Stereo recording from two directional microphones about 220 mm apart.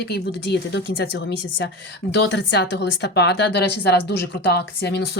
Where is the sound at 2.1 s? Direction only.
50° left (ahead or behind).